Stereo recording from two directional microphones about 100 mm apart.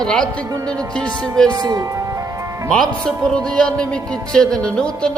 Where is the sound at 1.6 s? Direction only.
35° right (ahead or behind).